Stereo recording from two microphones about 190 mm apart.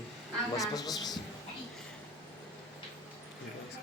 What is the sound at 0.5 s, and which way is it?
Speech, 20° left (ahead or behind).